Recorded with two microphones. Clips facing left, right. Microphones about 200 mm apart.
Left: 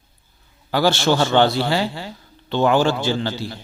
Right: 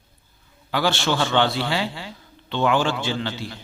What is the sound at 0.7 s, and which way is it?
A man's voice, 40° left (ahead or behind).